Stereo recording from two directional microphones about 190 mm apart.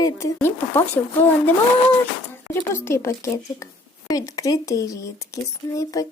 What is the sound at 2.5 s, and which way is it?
Speech, 15° left (ahead or behind).